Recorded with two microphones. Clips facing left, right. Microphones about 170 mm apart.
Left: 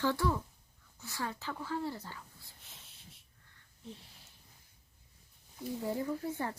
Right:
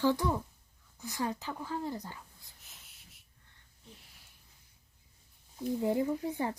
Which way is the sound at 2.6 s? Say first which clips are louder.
Left 3 dB; 30° left (ahead or behind).